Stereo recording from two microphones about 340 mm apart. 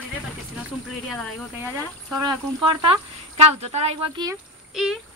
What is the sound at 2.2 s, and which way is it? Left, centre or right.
Speech, centre.